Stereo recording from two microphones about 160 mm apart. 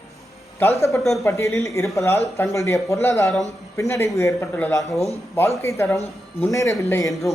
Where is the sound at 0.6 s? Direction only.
15° left (ahead or behind).